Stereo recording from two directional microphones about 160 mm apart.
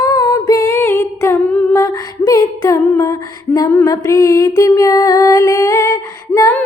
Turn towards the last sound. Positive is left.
turn(degrees=20)  # may be behind; listen again after turning